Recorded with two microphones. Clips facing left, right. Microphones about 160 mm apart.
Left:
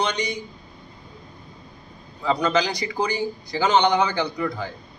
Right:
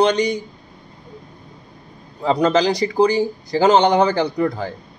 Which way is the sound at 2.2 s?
40° right (ahead or behind).